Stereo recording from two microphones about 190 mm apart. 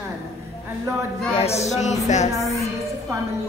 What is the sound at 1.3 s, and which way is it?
Speech, 35° left (ahead or behind).